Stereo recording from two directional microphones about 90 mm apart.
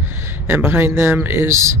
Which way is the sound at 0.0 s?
30° right (ahead or behind).